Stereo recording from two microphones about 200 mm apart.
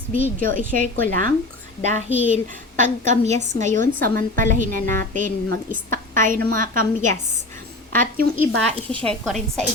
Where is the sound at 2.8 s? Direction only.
35° right (ahead or behind).